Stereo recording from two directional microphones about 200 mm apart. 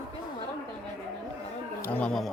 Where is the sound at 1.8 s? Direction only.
5° left (ahead or behind).